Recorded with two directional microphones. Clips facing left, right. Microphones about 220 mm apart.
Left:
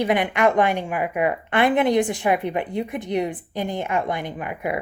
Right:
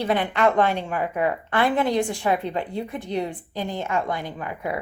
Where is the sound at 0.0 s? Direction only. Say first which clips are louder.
Left 2 dB; 15° left (ahead or behind).